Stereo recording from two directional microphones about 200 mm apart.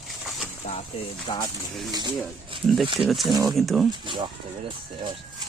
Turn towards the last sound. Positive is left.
turn(degrees=-25)  # may be behind; listen again after turning